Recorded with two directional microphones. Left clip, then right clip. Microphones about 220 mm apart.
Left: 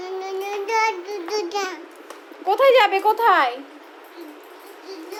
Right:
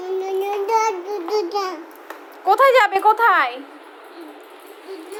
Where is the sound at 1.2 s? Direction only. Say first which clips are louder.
Right 4 dB; 30° left (ahead or behind).